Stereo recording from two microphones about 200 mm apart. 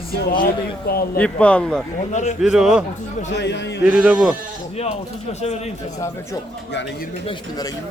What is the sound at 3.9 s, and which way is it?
Speech, 5° right (ahead or behind).